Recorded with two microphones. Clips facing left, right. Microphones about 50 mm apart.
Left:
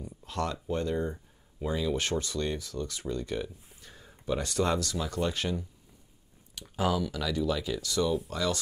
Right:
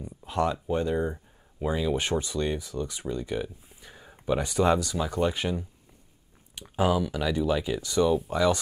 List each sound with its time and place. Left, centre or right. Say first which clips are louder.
0.2 s speech: right 6 dB; centre